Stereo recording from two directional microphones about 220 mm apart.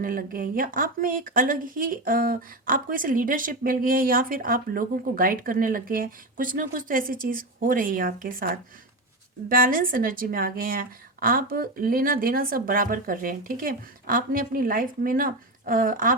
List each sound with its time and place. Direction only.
0.0 s speech: 40° right (ahead or behind)